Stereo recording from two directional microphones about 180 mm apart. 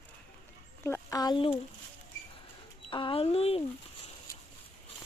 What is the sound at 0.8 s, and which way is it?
Speech, 15° left (ahead or behind).